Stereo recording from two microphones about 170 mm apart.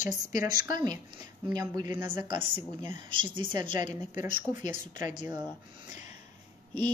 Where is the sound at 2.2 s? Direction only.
30° right (ahead or behind).